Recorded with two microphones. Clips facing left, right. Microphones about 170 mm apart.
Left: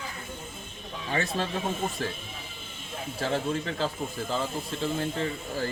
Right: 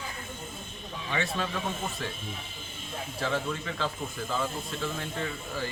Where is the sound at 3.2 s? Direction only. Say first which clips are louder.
Left 3 dB; 35° left (ahead or behind).